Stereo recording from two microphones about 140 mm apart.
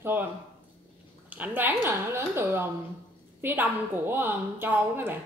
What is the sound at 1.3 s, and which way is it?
A woman's voice, 10° right (ahead or behind).